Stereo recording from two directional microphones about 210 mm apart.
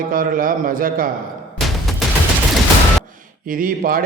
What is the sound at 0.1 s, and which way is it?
Speech, 40° right (ahead or behind).